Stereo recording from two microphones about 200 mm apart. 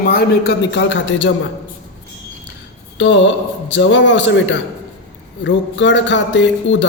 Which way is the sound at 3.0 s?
65° left (ahead or behind).